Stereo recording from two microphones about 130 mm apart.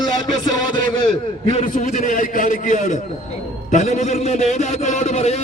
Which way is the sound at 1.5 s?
70° left (ahead or behind).